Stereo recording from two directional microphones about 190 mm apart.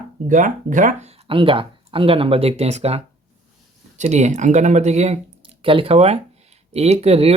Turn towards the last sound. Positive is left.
turn(degrees=-30)  # may be behind; listen again after turning